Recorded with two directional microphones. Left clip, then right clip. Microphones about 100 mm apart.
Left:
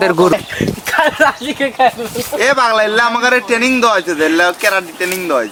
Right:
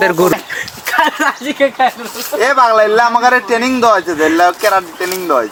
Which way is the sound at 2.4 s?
35° right (ahead or behind).